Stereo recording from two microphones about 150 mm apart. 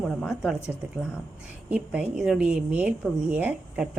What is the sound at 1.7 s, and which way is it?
A woman's voice, 10° right (ahead or behind).